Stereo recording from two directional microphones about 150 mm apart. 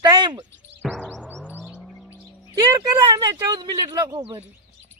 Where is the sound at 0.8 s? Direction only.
Centre (ahead or behind).